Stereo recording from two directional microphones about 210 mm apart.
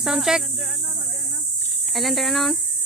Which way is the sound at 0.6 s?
Centre (ahead or behind).